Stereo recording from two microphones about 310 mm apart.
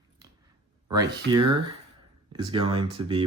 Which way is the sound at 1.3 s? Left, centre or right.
Centre.